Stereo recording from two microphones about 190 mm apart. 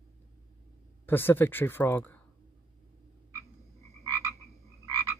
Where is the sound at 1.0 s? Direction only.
10° left (ahead or behind).